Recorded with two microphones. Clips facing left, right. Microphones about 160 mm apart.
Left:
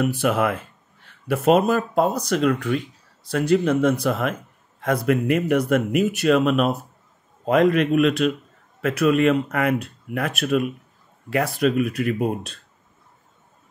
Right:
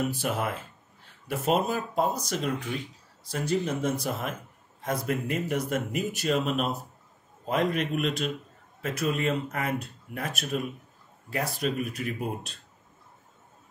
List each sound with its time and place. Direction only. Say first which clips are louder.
0.0 s a man's voice: left 8 dB; 75° left (ahead or behind)
3.3 s a man's voice: left 9 dB; 75° left (ahead or behind)
7.4 s speech: left 9 dB; 85° left